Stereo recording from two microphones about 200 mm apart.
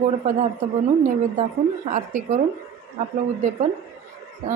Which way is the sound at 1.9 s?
40° right (ahead or behind).